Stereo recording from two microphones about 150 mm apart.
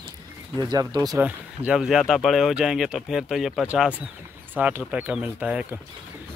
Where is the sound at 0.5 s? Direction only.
25° right (ahead or behind).